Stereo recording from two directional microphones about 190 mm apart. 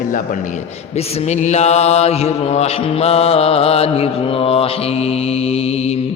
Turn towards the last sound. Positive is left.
turn(degrees=35)  # may be behind; listen again after turning